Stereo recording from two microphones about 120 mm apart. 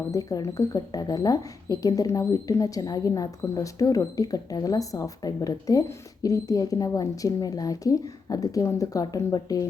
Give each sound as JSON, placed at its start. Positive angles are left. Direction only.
{"t": 0.1, "sound": "speech", "side_deg": 30}